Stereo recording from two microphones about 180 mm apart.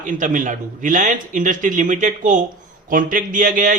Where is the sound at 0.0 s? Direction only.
45° right (ahead or behind).